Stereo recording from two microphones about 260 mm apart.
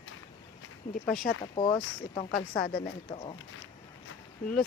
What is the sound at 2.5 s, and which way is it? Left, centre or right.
Speech, left.